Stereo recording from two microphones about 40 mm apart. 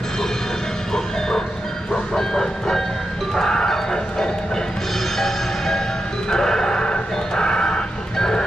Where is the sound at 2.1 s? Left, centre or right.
Centre.